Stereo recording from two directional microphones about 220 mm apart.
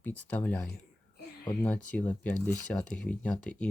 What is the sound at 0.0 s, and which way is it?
Speech, 5° left (ahead or behind).